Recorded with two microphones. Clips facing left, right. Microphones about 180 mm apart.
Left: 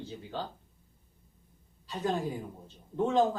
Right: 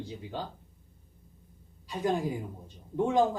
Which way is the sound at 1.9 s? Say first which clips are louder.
Right 2 dB; 15° right (ahead or behind).